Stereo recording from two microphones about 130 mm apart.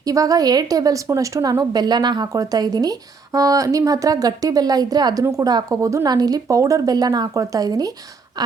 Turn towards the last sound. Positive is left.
turn(degrees=-30)  # may be behind; listen again after turning